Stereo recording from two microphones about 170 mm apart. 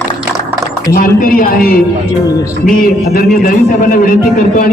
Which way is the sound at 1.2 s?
55° left (ahead or behind).